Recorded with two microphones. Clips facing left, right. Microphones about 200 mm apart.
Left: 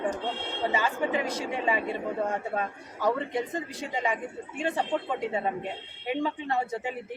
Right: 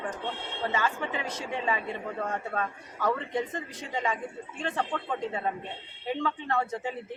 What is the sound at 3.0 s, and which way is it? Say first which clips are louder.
A man's voice: left 2 dB; 10° left (ahead or behind).